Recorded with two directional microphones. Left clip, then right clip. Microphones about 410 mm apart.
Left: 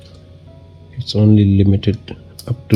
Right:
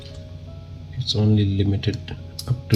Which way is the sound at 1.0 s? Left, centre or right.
Left.